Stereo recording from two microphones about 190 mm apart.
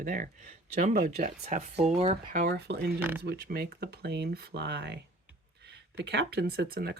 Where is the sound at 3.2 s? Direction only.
60° right (ahead or behind).